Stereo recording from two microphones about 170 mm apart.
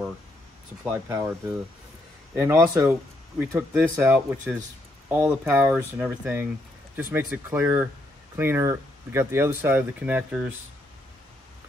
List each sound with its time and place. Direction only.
0.8 s speech: 15° right (ahead or behind)